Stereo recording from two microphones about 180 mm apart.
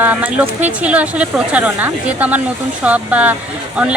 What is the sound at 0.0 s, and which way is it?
Speech, 10° right (ahead or behind).